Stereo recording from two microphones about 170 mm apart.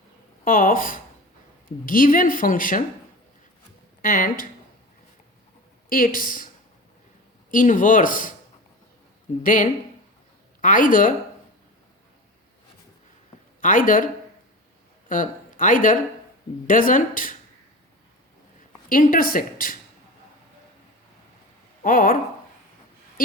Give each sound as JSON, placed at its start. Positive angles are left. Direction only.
{"t": 0.4, "sound": "speech", "side_deg": 55}
{"t": 4.0, "sound": "speech", "side_deg": 55}
{"t": 5.9, "sound": "speech", "side_deg": 55}
{"t": 7.5, "sound": "speech", "side_deg": 50}
{"t": 9.4, "sound": "speech", "side_deg": 50}
{"t": 13.6, "sound": "speech", "side_deg": 50}
{"t": 15.1, "sound": "speech", "side_deg": 50}
{"t": 18.9, "sound": "speech", "side_deg": 55}
{"t": 21.8, "sound": "speech", "side_deg": 55}